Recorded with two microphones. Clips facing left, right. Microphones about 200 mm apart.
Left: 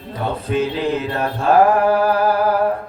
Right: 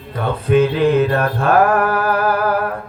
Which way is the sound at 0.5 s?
55° right (ahead or behind).